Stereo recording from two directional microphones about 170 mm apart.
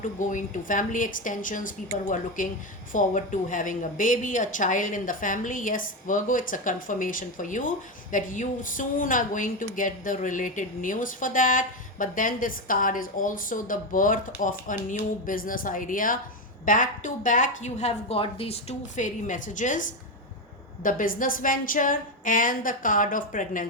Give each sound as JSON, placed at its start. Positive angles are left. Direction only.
{"t": 0.0, "sound": "a woman's voice", "side_deg": 50}
{"t": 20.8, "sound": "a woman's voice", "side_deg": 55}